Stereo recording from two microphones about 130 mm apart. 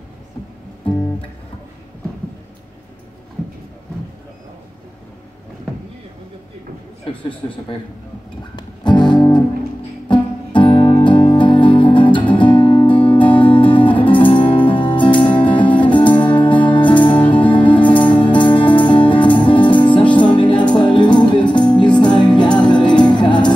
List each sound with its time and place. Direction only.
8.5 s music: 35° left (ahead or behind)